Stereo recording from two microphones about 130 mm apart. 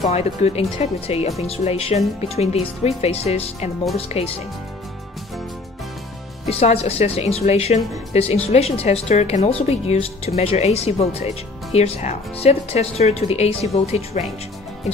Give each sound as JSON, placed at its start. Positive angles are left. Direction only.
{"t": 0.1, "sound": "speech", "side_deg": 55}
{"t": 6.5, "sound": "speech", "side_deg": 55}